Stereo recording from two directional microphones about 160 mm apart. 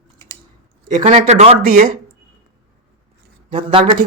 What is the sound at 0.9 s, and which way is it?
Speech, 55° right (ahead or behind).